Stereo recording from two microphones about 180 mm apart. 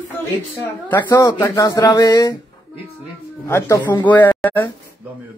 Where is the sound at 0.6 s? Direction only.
10° left (ahead or behind).